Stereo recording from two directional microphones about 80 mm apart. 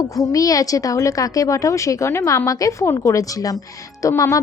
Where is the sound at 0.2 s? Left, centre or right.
Left.